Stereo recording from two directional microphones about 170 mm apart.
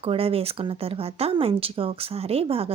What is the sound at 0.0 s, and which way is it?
Speech, 35° right (ahead or behind).